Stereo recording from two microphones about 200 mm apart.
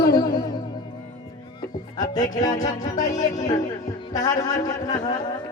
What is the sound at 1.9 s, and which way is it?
Speech, 20° left (ahead or behind).